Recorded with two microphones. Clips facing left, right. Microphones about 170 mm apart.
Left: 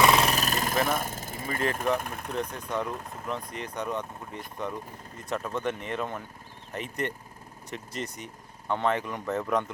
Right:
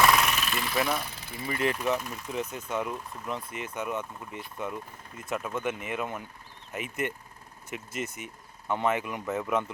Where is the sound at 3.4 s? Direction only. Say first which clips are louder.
Left 1 dB; 40° left (ahead or behind).